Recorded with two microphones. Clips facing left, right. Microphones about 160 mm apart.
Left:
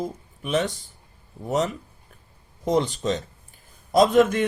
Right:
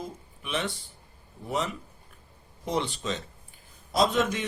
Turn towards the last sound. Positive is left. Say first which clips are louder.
# left 8 dB
turn(degrees=55)  # may be behind; listen again after turning